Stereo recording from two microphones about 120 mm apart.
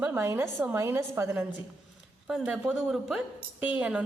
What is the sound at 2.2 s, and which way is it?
A woman's voice, 5° right (ahead or behind).